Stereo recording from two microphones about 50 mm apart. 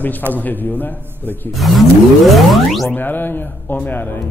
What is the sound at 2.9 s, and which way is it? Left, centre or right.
A man's voice, left.